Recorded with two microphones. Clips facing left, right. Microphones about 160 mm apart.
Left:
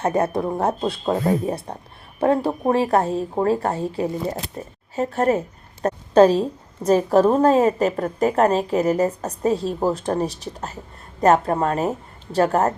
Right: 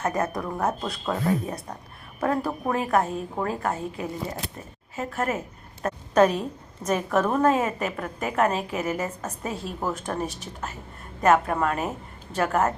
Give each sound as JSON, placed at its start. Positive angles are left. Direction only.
{"t": 0.0, "sound": "a woman's voice", "side_deg": 30}